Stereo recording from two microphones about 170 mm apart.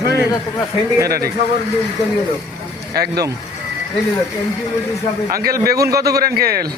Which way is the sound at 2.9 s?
65° right (ahead or behind).